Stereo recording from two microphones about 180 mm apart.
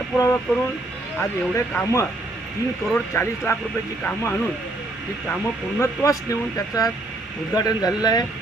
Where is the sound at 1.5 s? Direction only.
15° left (ahead or behind).